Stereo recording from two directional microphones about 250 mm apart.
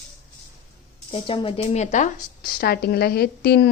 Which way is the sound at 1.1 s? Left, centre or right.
Left.